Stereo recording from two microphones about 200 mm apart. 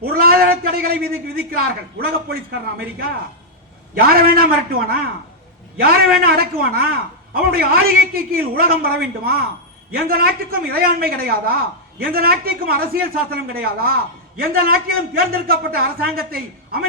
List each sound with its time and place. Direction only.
0.0 s a man's voice: 50° right (ahead or behind)